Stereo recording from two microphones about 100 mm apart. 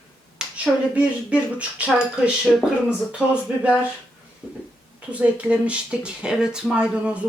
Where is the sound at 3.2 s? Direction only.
20° left (ahead or behind).